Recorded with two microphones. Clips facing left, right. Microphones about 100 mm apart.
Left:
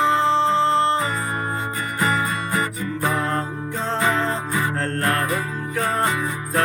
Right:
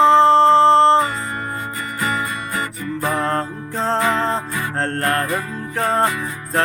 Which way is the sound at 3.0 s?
35° right (ahead or behind).